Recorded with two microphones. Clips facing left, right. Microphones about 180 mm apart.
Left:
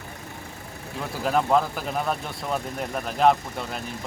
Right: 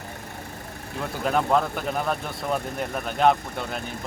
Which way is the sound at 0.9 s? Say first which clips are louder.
Even; centre (ahead or behind).